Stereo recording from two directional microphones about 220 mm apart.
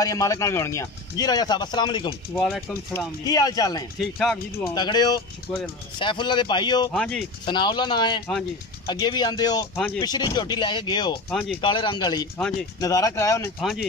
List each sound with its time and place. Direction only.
0.0 s speech: 15° left (ahead or behind)
4.0 s speech: centre (ahead or behind)
4.7 s speech: 20° left (ahead or behind)
6.9 s speech: 5° left (ahead or behind)
7.4 s speech: 20° left (ahead or behind)
11.2 s speech: centre (ahead or behind)
11.6 s speech: 20° left (ahead or behind)
12.4 s speech: 5° left (ahead or behind)
12.8 s speech: 15° left (ahead or behind)
13.6 s speech: centre (ahead or behind)